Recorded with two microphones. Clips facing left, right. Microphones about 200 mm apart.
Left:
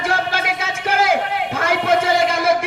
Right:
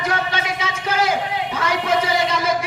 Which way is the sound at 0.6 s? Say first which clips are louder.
Left 1 dB; 50° left (ahead or behind).